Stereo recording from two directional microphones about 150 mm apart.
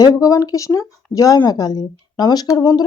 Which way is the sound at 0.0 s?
25° left (ahead or behind).